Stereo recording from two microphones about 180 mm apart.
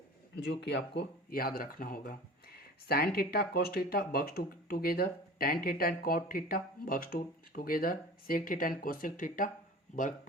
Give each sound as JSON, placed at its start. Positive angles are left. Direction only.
{"t": 0.3, "sound": "speech", "side_deg": 75}